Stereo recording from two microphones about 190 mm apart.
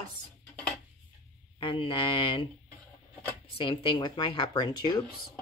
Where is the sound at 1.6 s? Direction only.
25° left (ahead or behind).